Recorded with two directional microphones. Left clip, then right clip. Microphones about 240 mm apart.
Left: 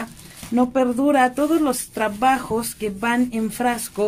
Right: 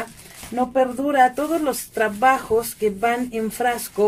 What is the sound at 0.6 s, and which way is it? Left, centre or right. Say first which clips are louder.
Speech: left 1 dB; left.